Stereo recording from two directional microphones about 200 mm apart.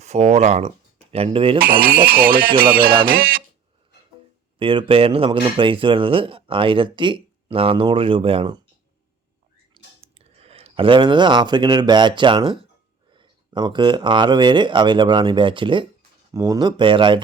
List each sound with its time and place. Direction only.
0.0 s speech: 35° right (ahead or behind)
1.5 s speech: 50° right (ahead or behind)
4.6 s speech: 25° right (ahead or behind)
9.7 s speech: 30° right (ahead or behind)